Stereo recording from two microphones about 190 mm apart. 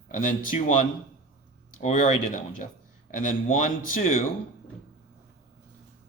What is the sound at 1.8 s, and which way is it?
A man's voice, 40° left (ahead or behind).